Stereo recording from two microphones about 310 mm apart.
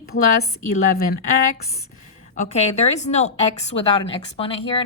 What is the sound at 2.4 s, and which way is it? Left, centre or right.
A woman's voice, centre.